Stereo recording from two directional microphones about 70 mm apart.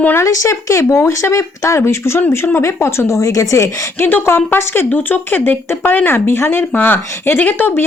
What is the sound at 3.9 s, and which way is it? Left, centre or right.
A woman's voice, left.